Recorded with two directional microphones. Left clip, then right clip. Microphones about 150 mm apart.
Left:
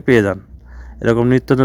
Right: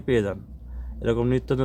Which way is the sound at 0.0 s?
60° left (ahead or behind).